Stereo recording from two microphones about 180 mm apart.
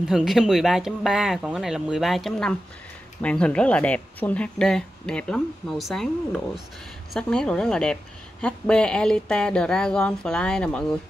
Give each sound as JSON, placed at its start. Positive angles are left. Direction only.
{"t": 0.0, "sound": "a woman's voice", "side_deg": 0}